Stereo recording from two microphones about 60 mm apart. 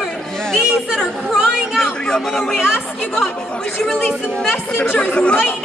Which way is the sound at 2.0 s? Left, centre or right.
Centre.